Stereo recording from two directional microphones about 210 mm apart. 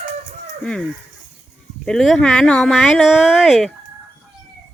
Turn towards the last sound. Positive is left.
turn(degrees=0)  # may be behind; listen again after turning